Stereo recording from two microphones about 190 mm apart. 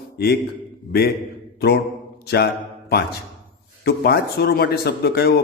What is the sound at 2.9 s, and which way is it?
A man's voice, 55° left (ahead or behind).